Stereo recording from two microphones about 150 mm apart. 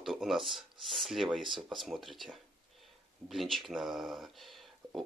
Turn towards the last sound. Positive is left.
turn(degrees=0)  # may be behind; listen again after turning